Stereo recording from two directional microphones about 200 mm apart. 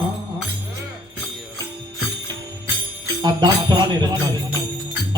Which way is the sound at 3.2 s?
20° right (ahead or behind).